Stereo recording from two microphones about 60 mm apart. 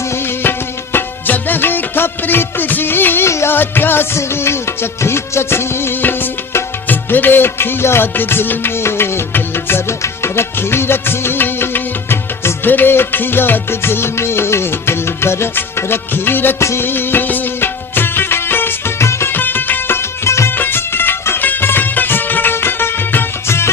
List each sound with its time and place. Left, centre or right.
0.9 s music: left
3.2 s music: left
3.5 s music: left
16.6 s music: left
16.8 s music of bollywood: left
19.3 s music: left
20.6 s music: left